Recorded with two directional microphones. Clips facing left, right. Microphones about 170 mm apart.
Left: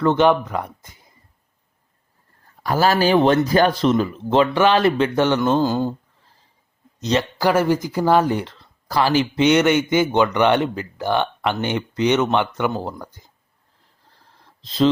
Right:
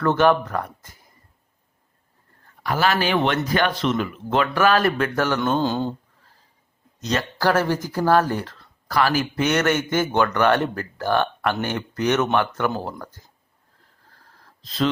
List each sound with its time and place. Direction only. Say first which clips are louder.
0.0 s speech: left 2 dB; 15° left (ahead or behind)
2.6 s speech: left 4 dB; 35° left (ahead or behind)
5.4 s speech: left 3 dB; 5° left (ahead or behind)
7.0 s speech: left 3 dB; 25° left (ahead or behind)
14.6 s speech: left 5 dB; 30° left (ahead or behind)